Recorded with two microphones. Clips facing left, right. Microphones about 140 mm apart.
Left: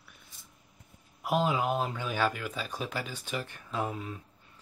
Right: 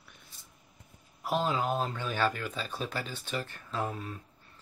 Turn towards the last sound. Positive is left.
turn(degrees=10)  # may be behind; listen again after turning